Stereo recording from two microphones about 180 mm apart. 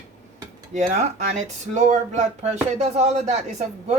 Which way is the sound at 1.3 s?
40° right (ahead or behind).